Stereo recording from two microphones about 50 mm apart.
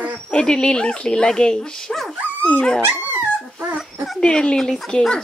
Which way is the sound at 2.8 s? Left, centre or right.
Right.